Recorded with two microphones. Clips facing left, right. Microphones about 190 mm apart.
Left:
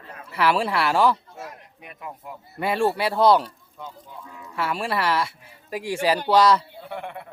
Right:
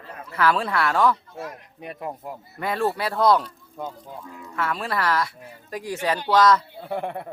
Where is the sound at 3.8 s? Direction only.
45° right (ahead or behind).